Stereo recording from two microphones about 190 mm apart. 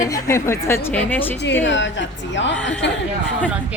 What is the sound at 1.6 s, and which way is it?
Speech, 75° left (ahead or behind).